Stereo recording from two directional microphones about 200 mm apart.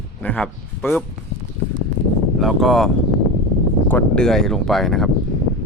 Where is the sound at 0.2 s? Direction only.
5° left (ahead or behind).